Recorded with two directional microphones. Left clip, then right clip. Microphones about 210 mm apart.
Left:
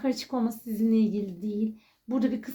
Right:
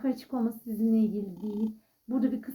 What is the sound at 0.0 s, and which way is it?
Speech, 35° left (ahead or behind).